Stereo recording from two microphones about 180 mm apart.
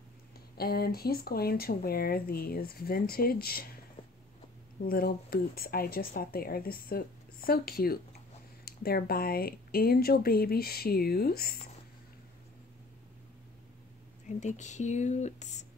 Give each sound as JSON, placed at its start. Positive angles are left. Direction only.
{"t": 0.6, "sound": "speech", "side_deg": 60}
{"t": 4.8, "sound": "speech", "side_deg": 55}
{"t": 14.2, "sound": "speech", "side_deg": 40}